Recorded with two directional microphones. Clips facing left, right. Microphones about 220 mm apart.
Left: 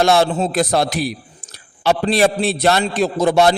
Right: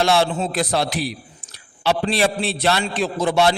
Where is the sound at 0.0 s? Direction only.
45° left (ahead or behind).